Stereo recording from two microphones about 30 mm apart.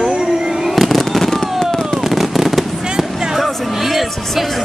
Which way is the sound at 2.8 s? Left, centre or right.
Right.